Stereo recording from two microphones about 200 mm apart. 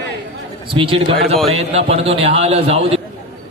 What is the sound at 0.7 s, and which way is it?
A man's voice, 25° right (ahead or behind).